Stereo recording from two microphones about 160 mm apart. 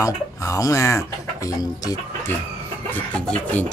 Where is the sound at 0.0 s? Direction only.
20° left (ahead or behind).